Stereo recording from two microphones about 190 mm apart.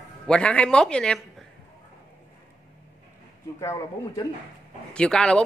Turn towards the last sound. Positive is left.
turn(degrees=5)  # may be behind; listen again after turning